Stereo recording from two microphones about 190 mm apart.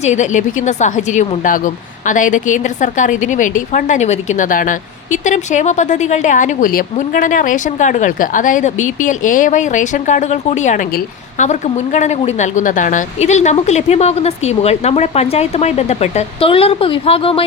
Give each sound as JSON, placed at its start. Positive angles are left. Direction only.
{"t": 0.0, "sound": "speech", "side_deg": 40}